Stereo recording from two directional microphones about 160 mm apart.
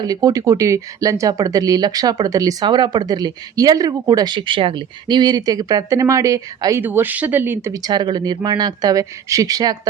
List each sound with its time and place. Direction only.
0.0 s speech: 20° right (ahead or behind)